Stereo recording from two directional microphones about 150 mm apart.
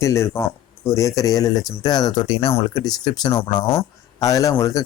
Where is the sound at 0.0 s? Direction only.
20° left (ahead or behind); by 3.8 s 35° left (ahead or behind).